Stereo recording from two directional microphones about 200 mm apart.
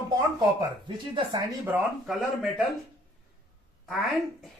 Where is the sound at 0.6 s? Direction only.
20° right (ahead or behind).